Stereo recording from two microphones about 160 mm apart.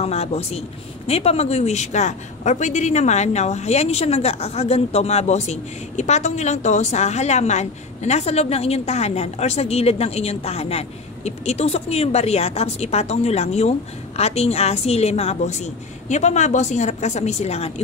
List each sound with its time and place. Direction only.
0.0 s speech: 40° left (ahead or behind)